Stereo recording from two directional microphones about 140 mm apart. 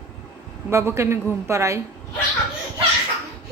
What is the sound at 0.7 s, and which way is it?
A woman's voice, 20° right (ahead or behind).